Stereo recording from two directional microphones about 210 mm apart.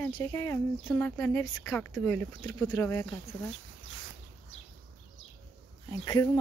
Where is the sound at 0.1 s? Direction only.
15° left (ahead or behind).